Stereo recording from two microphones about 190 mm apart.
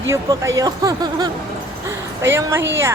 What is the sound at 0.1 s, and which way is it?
Speech, 15° right (ahead or behind).